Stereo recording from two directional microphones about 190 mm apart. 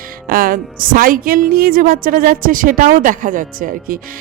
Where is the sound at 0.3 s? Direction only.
45° right (ahead or behind).